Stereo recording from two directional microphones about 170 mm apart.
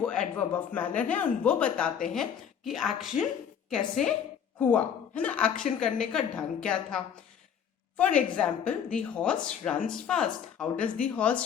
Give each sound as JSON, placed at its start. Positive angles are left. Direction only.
{"t": 0.0, "sound": "a woman's voice", "side_deg": 5}
{"t": 10.8, "sound": "speech", "side_deg": 50}
{"t": 11.1, "sound": "speech", "side_deg": 5}